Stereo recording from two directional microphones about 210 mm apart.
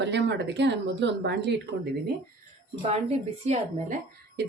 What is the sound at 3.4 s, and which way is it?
Speech, 30° right (ahead or behind).